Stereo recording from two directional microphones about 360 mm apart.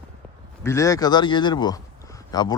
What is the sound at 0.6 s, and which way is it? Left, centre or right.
Speech, centre.